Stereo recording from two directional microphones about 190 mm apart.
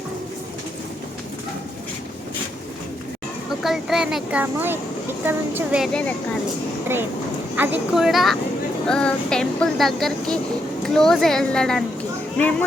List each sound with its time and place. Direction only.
3.6 s speech: centre (ahead or behind)
7.5 s speech: 10° right (ahead or behind); by 12.6 s 5° left (ahead or behind)